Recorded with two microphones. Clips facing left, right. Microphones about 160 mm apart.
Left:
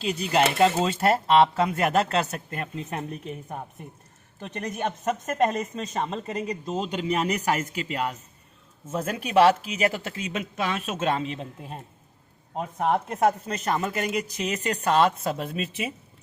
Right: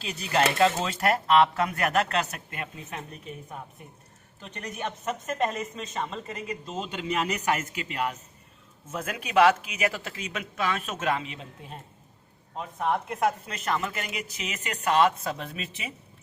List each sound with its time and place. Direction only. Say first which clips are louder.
0.0 s speech: left 3 dB; 20° left (ahead or behind)
2.5 s speech: left 5 dB; 40° left (ahead or behind)
4.4 s speech: left 5 dB; 45° left (ahead or behind)
12.9 s speech: left 3 dB; 45° left (ahead or behind)